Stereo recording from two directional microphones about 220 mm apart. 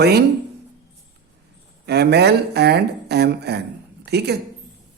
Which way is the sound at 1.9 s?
50° right (ahead or behind).